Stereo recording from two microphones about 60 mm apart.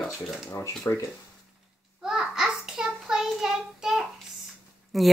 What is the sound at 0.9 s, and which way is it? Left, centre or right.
Speech, left.